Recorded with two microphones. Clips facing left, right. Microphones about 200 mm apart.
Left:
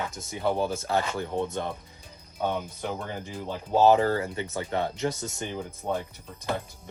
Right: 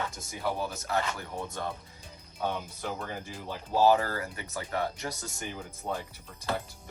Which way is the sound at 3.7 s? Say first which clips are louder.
Left 4 dB; 25° left (ahead or behind).